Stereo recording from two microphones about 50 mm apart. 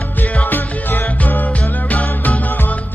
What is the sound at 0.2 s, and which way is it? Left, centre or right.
Music, left.